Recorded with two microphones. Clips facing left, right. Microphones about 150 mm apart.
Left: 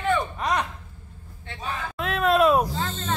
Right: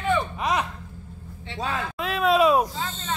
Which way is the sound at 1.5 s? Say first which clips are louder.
Right 4 dB; 90° right.